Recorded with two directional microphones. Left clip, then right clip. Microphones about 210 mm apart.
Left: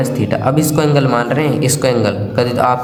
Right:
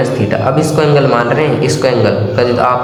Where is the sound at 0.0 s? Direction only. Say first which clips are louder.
Right 3 dB; 45° left (ahead or behind).